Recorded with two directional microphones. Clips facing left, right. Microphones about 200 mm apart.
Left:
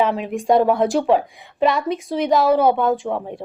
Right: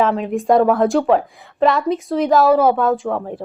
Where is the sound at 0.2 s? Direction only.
Centre (ahead or behind).